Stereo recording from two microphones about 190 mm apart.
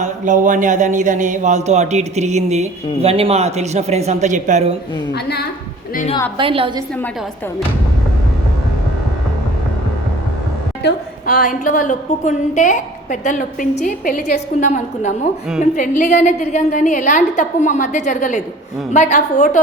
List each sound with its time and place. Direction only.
0.0 s speech: 40° right (ahead or behind)
5.1 s a woman's voice: 60° left (ahead or behind)
6.3 s a woman's voice: 30° right (ahead or behind)
10.8 s a woman's voice: 50° left (ahead or behind)